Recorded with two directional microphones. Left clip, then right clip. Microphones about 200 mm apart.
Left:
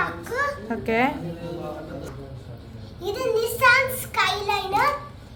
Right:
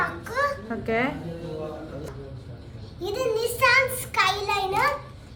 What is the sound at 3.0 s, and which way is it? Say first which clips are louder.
A child's voice: left 2 dB; 10° right (ahead or behind).